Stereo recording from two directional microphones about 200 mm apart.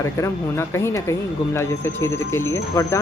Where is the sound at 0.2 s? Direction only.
15° left (ahead or behind).